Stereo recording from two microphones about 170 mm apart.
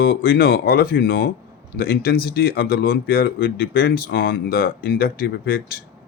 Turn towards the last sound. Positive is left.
turn(degrees=60)  # may be behind; listen again after turning